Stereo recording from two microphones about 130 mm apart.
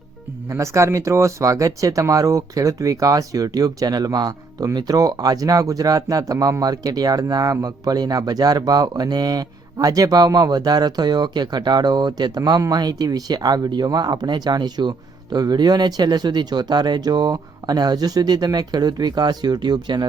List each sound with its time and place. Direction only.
0.4 s speech: 20° right (ahead or behind)